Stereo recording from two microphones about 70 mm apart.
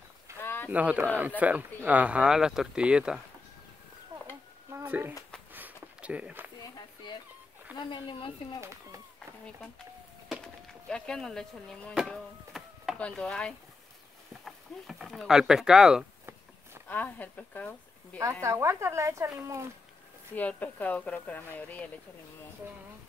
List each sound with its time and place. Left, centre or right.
0.4 s a sound: left
0.7 s speech: right
4.7 s a sound: right
7.7 s speech: left
8.5 s speech: right
10.4 s speech: centre
12.5 s chop: centre
12.9 s chopping: centre
14.4 s speech: centre
16.9 s speech: left
18.4 s speech: right
20.3 s speech: left